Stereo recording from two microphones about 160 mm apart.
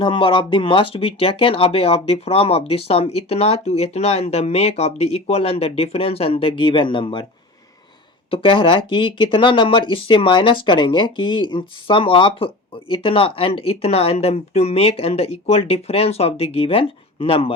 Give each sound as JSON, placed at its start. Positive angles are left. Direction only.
{"t": 0.0, "sound": "speech", "side_deg": 30}
{"t": 8.3, "sound": "speech", "side_deg": 35}